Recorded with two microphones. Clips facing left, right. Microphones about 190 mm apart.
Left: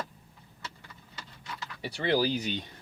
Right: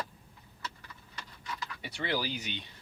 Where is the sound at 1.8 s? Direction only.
35° left (ahead or behind).